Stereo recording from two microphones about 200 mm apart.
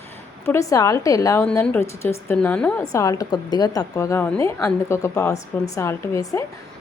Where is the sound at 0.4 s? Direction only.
15° left (ahead or behind).